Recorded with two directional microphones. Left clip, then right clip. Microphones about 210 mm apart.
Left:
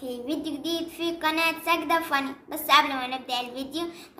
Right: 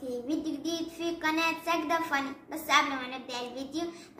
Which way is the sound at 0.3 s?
35° left (ahead or behind).